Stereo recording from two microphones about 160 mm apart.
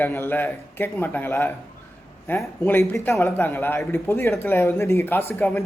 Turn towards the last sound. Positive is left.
turn(degrees=15)  # may be behind; listen again after turning